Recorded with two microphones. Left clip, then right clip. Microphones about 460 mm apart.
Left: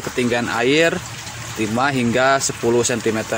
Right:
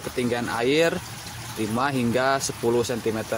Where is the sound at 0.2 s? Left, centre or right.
Right.